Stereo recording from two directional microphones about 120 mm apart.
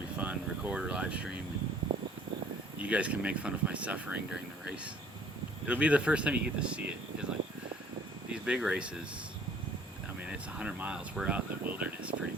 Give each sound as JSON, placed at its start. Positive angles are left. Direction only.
{"t": 0.2, "sound": "speech", "side_deg": -10}
{"t": 2.8, "sound": "speech", "side_deg": -10}
{"t": 5.6, "sound": "speech", "side_deg": -10}
{"t": 8.3, "sound": "speech", "side_deg": -10}
{"t": 10.2, "sound": "speech", "side_deg": -10}